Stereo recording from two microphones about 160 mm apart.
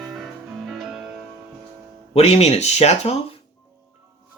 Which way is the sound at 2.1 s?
40° left (ahead or behind).